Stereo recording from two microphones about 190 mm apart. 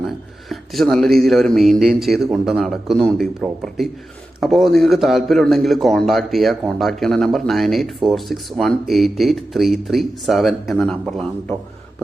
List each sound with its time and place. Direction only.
0.5 s a man's voice: centre (ahead or behind)